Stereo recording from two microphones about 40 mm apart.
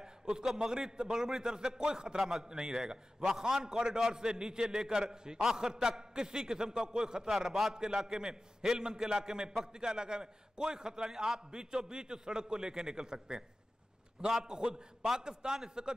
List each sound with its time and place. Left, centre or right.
0.0 s a sound: centre
0.6 s a man's voice: centre
2.1 s a man's voice: centre
7.2 s a man's voice: centre
7.7 s a man's voice: centre